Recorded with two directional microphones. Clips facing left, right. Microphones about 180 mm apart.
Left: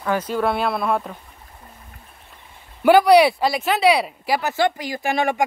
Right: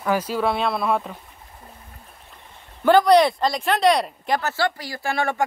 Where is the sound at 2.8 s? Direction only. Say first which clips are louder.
Left 2 dB; 10° left (ahead or behind).